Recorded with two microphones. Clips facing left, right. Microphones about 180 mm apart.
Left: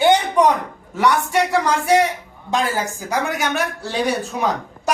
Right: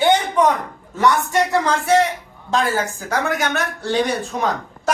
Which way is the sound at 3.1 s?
10° left (ahead or behind).